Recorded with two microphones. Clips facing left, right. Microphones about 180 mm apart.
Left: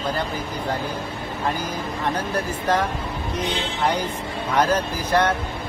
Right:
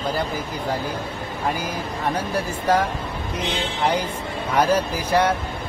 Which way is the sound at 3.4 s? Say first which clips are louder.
Right 1 dB; 10° right (ahead or behind).